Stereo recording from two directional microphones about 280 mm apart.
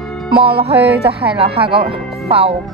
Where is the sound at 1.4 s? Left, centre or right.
Centre.